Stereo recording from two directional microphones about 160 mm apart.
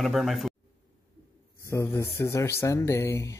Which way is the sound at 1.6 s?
15° left (ahead or behind).